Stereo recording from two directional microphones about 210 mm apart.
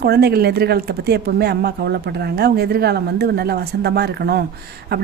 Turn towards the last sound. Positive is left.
turn(degrees=-50)  # may be behind; listen again after turning